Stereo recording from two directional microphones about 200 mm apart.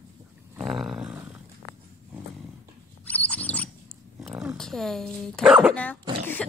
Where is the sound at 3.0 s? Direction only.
5° left (ahead or behind).